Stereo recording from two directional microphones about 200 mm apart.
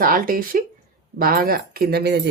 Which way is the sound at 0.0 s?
45° right (ahead or behind).